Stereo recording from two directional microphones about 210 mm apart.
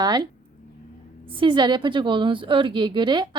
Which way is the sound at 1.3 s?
20° right (ahead or behind).